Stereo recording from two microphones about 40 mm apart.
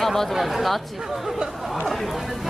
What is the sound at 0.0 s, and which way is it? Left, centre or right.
Speech, centre.